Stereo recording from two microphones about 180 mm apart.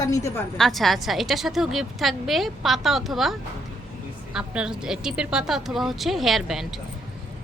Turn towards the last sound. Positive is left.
turn(degrees=0)  # may be behind; listen again after turning